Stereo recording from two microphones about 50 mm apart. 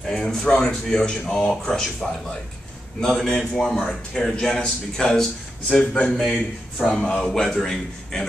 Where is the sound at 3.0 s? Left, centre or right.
Centre.